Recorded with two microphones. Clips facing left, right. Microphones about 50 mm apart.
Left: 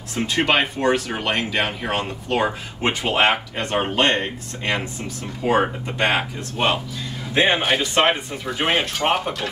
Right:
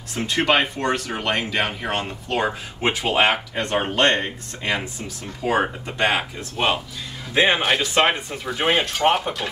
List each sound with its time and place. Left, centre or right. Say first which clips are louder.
0.1 s speech: even; centre